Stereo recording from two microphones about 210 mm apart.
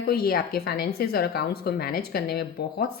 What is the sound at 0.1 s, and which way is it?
A woman's voice, 45° left (ahead or behind).